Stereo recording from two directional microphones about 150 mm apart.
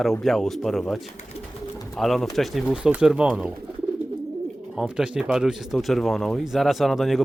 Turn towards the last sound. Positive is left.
turn(degrees=0)  # may be behind; listen again after turning